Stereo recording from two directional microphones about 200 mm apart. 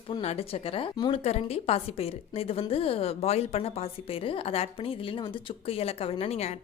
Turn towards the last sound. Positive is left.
turn(degrees=30)  # may be behind; listen again after turning